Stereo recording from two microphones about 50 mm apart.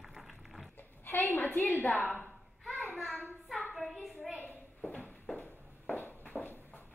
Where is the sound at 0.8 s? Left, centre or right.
Left.